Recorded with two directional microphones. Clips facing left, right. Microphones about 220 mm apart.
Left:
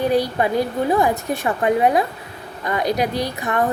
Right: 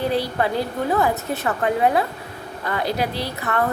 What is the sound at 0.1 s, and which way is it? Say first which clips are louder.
A woman's voice: left 3 dB; 15° left (ahead or behind).